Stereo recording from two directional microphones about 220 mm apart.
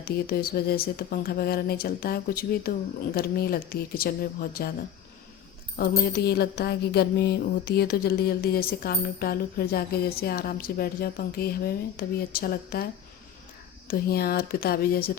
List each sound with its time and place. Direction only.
0.0 s speech: 45° left (ahead or behind)
6.1 s speech: 45° left (ahead or behind)